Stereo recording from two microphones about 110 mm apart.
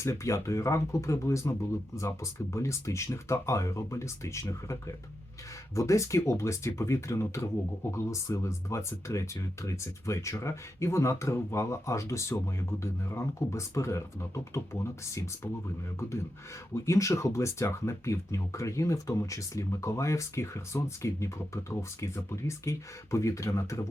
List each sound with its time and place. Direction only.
0.0 s speech: 25° left (ahead or behind)